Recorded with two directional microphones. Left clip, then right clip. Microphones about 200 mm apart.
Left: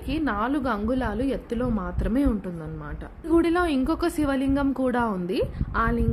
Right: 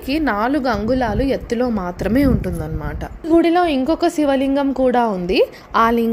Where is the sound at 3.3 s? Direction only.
Centre (ahead or behind).